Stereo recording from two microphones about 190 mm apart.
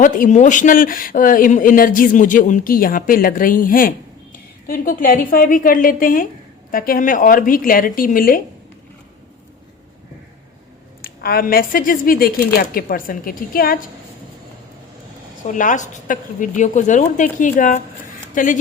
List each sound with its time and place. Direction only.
0.0 s a man's voice: 40° left (ahead or behind)
11.0 s a woman's voice: 50° left (ahead or behind)
15.4 s a woman's voice: 40° left (ahead or behind)